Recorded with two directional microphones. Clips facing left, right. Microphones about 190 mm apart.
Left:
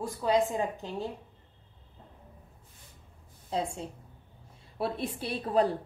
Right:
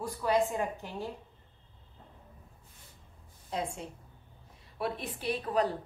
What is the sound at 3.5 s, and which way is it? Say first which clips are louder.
A woman's voice: left 3 dB; 30° left (ahead or behind).